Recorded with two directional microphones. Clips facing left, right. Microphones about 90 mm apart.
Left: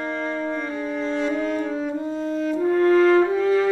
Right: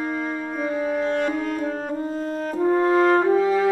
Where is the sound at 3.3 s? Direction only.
5° right (ahead or behind).